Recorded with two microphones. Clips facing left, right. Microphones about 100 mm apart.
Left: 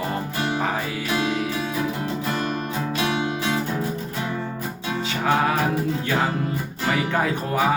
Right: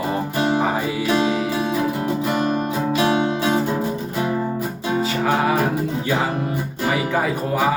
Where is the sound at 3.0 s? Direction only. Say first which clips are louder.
Right 5 dB; 35° right (ahead or behind).